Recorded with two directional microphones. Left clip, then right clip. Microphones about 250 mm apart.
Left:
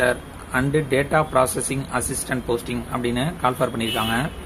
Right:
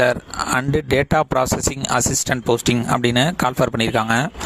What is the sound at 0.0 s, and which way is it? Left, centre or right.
Speech, right.